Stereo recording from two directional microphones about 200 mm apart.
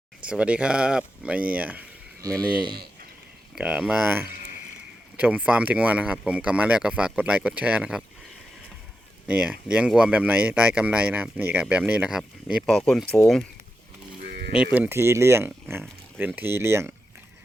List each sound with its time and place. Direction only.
0.3 s speech: 5° right (ahead or behind)
2.4 s speech: 20° right (ahead or behind)
3.5 s speech: 5° right (ahead or behind)
9.2 s speech: 5° right (ahead or behind)
14.5 s speech: 5° right (ahead or behind)